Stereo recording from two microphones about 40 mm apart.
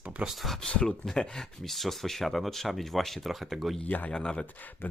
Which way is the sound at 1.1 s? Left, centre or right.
Centre.